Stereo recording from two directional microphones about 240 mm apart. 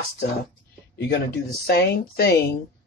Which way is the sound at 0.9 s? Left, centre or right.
Left.